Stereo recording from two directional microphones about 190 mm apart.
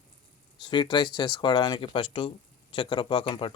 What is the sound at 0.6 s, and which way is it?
Speech, 25° left (ahead or behind).